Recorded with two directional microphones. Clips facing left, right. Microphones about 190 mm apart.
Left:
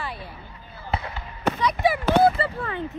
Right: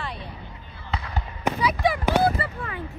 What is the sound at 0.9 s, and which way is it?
Basketball bounce, 25° left (ahead or behind).